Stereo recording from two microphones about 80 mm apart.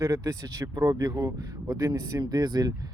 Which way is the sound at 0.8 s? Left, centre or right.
Right.